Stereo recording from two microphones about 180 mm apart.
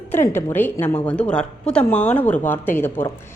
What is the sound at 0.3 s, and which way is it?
A woman's voice, 10° left (ahead or behind).